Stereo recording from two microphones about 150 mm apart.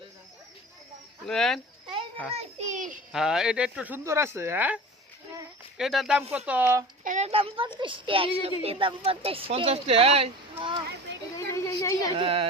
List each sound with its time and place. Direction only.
1.3 s speech: 5° left (ahead or behind)
2.3 s a child's voice: 45° right (ahead or behind)
3.1 s speech: 5° right (ahead or behind)
7.0 s a sound: 60° right (ahead or behind)
7.3 s speech: 35° right (ahead or behind)
11.3 s a sound: 20° left (ahead or behind)
12.1 s speech: 35° right (ahead or behind)